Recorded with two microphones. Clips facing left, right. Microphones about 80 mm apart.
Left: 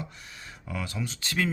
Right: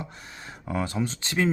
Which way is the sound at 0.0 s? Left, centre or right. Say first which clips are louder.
Right 2 dB; right.